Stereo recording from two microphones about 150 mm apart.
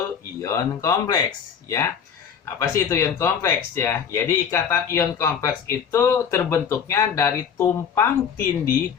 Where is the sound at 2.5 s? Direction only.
20° left (ahead or behind).